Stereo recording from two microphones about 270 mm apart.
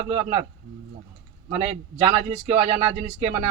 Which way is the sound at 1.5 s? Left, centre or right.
Right.